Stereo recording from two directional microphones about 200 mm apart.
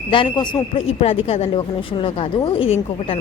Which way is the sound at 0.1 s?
25° left (ahead or behind).